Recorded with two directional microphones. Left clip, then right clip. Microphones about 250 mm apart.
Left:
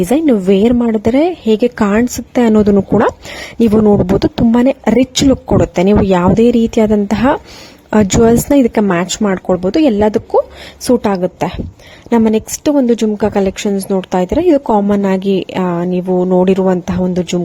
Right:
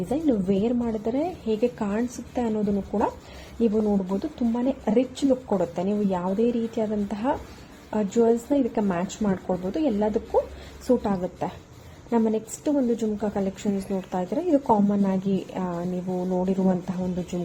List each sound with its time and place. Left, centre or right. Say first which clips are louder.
0.1 s a woman's voice: left 12 dB; left